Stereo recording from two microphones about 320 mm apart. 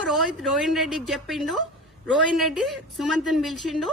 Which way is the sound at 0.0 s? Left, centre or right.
Centre.